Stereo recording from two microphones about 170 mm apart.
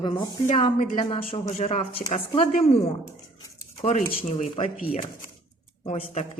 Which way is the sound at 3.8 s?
40° left (ahead or behind).